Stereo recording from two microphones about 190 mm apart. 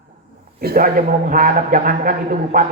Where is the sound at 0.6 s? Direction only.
50° right (ahead or behind).